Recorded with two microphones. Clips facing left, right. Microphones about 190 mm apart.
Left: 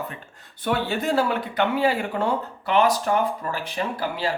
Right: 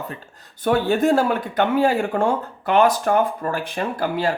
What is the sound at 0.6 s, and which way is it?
Speech, 45° right (ahead or behind).